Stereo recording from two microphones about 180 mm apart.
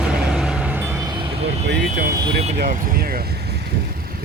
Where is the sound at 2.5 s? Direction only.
55° right (ahead or behind).